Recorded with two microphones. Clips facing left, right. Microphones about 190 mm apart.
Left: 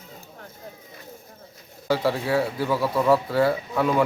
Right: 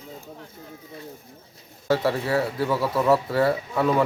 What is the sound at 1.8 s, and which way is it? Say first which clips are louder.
Speech: even; centre (ahead or behind).